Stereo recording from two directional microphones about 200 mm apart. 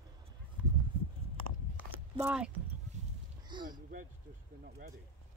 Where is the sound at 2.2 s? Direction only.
10° right (ahead or behind).